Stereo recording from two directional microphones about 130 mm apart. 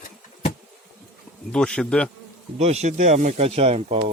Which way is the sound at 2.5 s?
60° right (ahead or behind).